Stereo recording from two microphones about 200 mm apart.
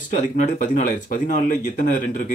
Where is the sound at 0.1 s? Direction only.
40° left (ahead or behind).